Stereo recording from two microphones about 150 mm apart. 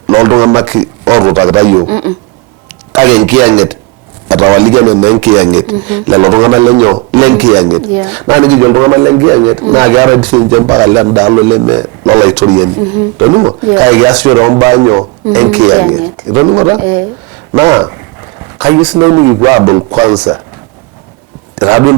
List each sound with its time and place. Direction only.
0.1 s a man's voice: 25° right (ahead or behind)
4.3 s a man's voice: 25° right (ahead or behind)
7.2 s a man's voice: 10° right (ahead or behind)
7.4 s a man's voice: 30° right (ahead or behind)
13.7 s a man's voice: 20° right (ahead or behind)
15.3 s a man's voice: 20° right (ahead or behind)
18.9 s a man's voice: 25° right (ahead or behind)
21.6 s a man's voice: 20° right (ahead or behind)